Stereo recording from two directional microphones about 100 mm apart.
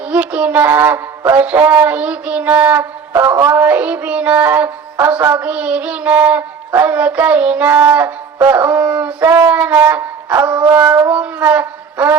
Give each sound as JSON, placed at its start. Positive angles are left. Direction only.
{"t": 0.1, "sound": "a sound", "side_deg": -15}
{"t": 10.8, "sound": "dog", "side_deg": -30}
{"t": 11.1, "sound": "shofar", "side_deg": -15}